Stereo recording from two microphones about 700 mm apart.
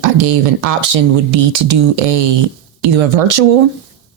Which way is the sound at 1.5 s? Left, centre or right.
Right.